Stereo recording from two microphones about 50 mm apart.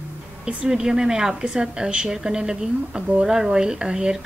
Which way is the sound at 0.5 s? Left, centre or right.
Centre.